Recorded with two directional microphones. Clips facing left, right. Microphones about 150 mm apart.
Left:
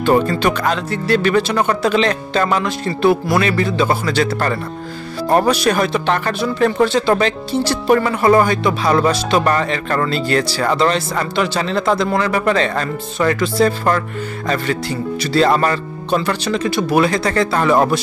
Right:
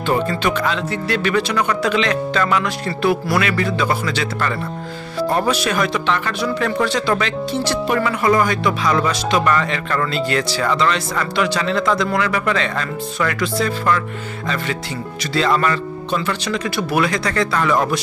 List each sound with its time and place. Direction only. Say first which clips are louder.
0.0 s speech: left 4 dB; 35° left (ahead or behind)
6.4 s speech: left 5 dB; 30° left (ahead or behind)
15.3 s speech: left 3 dB; 40° left (ahead or behind)